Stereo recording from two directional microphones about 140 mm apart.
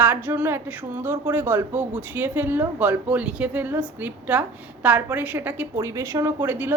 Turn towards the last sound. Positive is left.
turn(degrees=-15)  # may be behind; listen again after turning